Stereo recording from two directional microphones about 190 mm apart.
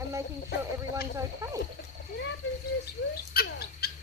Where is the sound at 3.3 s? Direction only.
55° left (ahead or behind).